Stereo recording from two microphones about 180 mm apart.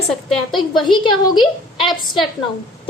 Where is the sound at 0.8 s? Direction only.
25° left (ahead or behind).